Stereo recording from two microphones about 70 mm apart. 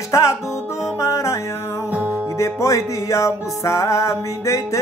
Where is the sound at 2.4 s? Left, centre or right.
Left.